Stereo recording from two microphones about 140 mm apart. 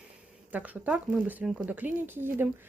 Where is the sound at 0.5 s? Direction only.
10° right (ahead or behind).